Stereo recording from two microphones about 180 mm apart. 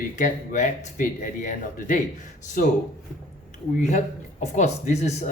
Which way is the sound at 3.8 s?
40° left (ahead or behind).